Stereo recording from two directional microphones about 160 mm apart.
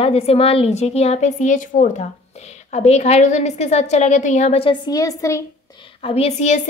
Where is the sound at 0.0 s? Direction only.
40° left (ahead or behind); by 2.0 s 55° left (ahead or behind).